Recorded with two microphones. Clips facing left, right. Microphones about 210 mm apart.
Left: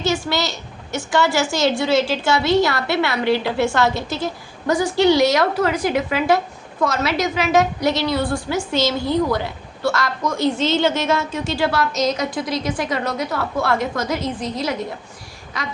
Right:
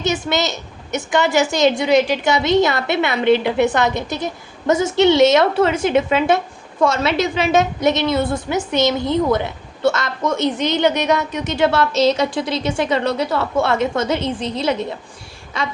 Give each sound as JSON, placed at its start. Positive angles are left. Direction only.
{"t": 0.0, "sound": "a woman's voice", "side_deg": -20}